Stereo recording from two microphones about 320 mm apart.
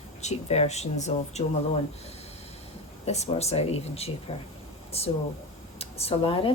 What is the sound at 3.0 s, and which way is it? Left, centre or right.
Speech, centre.